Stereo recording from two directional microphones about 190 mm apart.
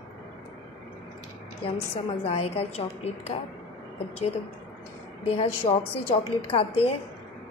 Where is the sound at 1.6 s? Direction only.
30° left (ahead or behind).